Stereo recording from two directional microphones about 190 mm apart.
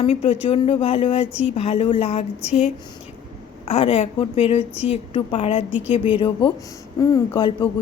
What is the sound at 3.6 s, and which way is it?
A woman's voice, 30° left (ahead or behind).